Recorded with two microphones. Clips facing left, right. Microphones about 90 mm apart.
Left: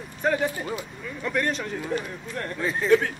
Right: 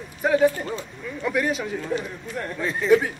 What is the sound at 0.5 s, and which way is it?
Speech, 10° left (ahead or behind).